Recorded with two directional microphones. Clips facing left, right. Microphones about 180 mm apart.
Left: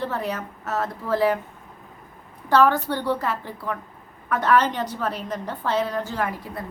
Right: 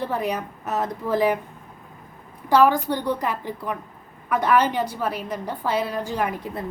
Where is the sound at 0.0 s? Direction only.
15° right (ahead or behind).